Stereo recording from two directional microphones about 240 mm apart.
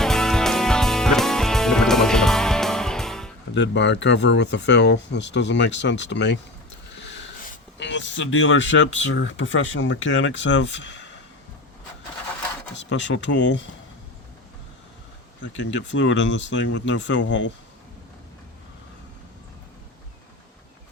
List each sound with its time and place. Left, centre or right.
0.0 s music: centre
3.5 s speech: left
7.0 s a sound: left
7.9 s speech: left
12.7 s speech: left
15.4 s speech: left